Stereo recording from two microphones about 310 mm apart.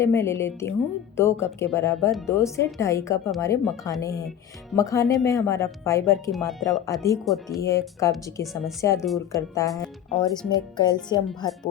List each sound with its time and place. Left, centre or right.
0.0 s speech: centre
9.6 s speech: centre